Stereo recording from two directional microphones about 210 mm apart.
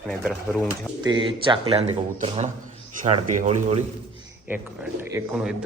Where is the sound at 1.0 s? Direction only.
20° right (ahead or behind).